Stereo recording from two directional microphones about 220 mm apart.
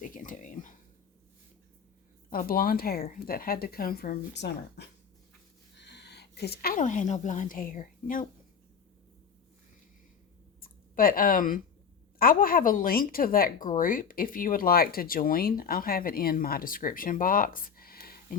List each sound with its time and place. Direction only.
0.0 s a sound: 35° left (ahead or behind)
2.3 s speech: 40° left (ahead or behind)
10.6 s speech: 40° left (ahead or behind)